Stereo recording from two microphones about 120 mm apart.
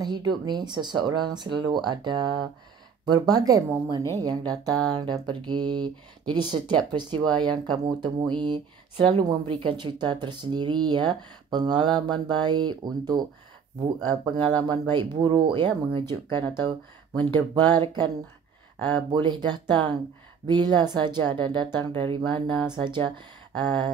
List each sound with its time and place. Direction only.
0.0 s speech: 35° right (ahead or behind)
14.6 s speech: 40° right (ahead or behind)